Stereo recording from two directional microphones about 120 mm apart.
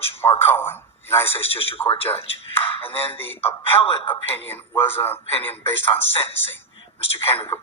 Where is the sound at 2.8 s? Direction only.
20° left (ahead or behind).